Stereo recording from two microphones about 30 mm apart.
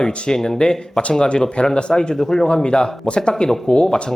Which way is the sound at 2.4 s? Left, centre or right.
Left.